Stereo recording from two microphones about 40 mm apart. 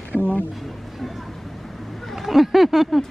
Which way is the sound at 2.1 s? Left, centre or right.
Centre.